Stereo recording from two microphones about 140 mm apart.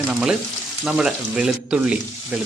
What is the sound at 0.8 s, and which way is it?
Speech, 5° right (ahead or behind).